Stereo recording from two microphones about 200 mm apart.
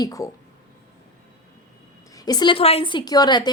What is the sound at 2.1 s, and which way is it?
A woman's voice, 20° left (ahead or behind).